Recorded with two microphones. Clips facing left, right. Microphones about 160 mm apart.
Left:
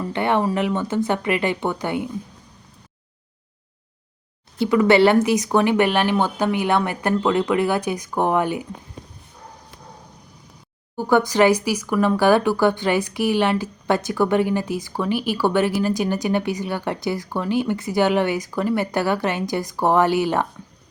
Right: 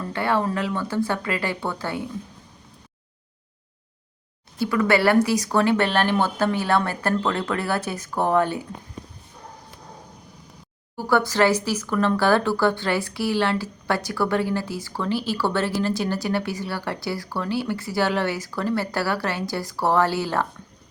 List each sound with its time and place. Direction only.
0.0 s speech: 20° left (ahead or behind)
4.6 s speech: 20° left (ahead or behind)
10.9 s speech: 20° left (ahead or behind)